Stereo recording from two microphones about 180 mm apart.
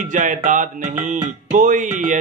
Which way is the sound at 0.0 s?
45° right (ahead or behind).